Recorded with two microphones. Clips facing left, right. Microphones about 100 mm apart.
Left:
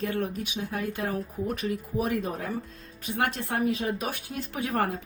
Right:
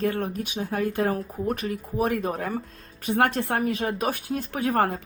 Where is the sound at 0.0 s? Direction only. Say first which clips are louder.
Right 3 dB; 45° right (ahead or behind).